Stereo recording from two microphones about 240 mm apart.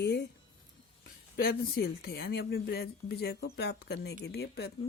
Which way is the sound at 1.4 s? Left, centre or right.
Left.